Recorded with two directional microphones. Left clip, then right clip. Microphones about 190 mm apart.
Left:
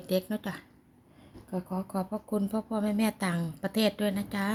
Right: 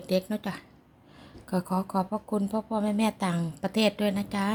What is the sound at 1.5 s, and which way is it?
A woman's voice, 20° right (ahead or behind).